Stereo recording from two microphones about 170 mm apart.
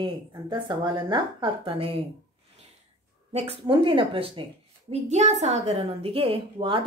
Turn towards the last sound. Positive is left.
turn(degrees=-30)  # may be behind; listen again after turning